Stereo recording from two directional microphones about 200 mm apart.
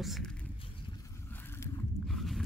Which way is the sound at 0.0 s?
Centre (ahead or behind).